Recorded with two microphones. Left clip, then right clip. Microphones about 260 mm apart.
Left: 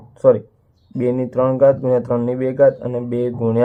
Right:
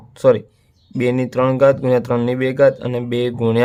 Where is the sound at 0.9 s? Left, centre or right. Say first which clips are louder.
Right 1 dB; right.